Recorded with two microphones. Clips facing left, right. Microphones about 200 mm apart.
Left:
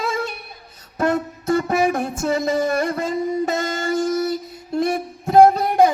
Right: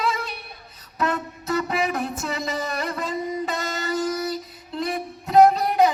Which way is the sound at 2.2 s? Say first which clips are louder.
Left 8 dB; 50° left (ahead or behind).